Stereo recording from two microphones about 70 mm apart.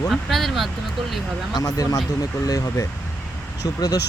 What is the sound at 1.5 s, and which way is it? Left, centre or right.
Speech, left.